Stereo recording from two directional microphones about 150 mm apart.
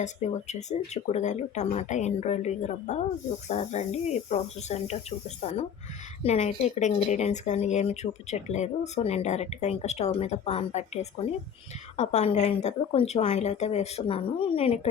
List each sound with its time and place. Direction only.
0.0 s speech: 50° left (ahead or behind)